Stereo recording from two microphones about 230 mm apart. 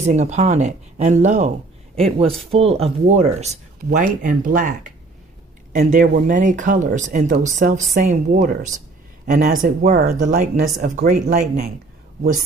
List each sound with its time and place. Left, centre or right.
0.0 s speech: right